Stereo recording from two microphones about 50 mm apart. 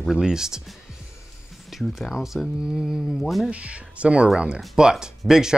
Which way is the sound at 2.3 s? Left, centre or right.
Centre.